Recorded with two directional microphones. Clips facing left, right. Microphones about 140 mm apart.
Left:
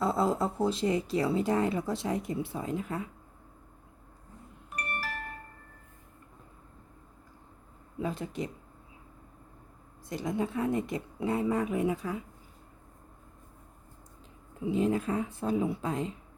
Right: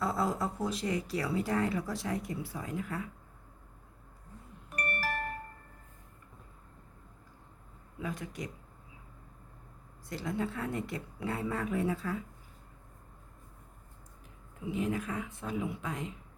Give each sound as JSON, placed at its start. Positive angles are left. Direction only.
{"t": 0.0, "sound": "speech", "side_deg": 25}
{"t": 4.7, "sound": "music", "side_deg": -50}
{"t": 7.9, "sound": "speech", "side_deg": 30}
{"t": 10.1, "sound": "speech", "side_deg": 20}
{"t": 14.6, "sound": "a woman's voice", "side_deg": 30}